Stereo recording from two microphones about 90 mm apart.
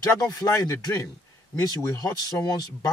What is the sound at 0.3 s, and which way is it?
Speech, 40° left (ahead or behind).